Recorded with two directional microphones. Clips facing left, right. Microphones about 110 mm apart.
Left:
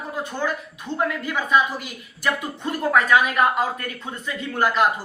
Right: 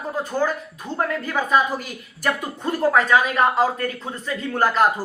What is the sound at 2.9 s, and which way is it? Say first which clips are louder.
Speech: even; 30° right (ahead or behind).